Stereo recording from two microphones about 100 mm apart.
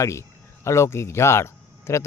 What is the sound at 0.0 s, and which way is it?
A man's voice, 30° left (ahead or behind).